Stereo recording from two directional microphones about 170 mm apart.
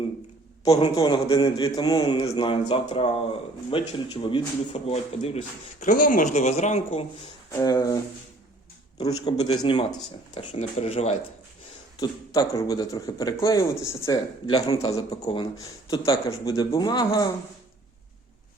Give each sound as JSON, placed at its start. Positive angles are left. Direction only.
{"t": 0.7, "sound": "speech", "side_deg": 35}
{"t": 5.8, "sound": "speech", "side_deg": 50}
{"t": 7.5, "sound": "speech", "side_deg": 25}
{"t": 9.0, "sound": "speech", "side_deg": 25}
{"t": 10.3, "sound": "speech", "side_deg": 35}
{"t": 11.9, "sound": "speech", "side_deg": 25}